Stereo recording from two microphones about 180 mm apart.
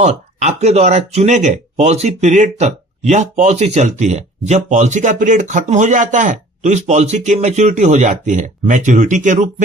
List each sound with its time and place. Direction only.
0.0 s speech: 40° right (ahead or behind)